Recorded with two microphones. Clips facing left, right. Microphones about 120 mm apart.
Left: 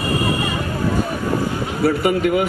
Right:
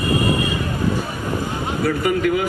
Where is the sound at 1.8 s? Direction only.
25° left (ahead or behind).